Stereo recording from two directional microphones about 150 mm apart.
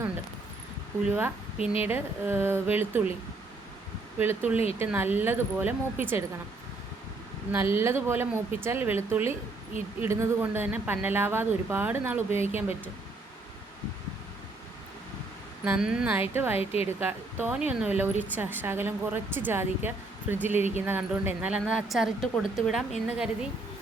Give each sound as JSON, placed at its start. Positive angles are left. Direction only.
{"t": 1.0, "sound": "speech", "side_deg": -10}
{"t": 4.2, "sound": "speech", "side_deg": -10}
{"t": 7.5, "sound": "speech", "side_deg": -15}
{"t": 15.6, "sound": "speech", "side_deg": -10}
{"t": 16.6, "sound": "a woman's voice", "side_deg": 40}
{"t": 17.0, "sound": "a woman's voice", "side_deg": -15}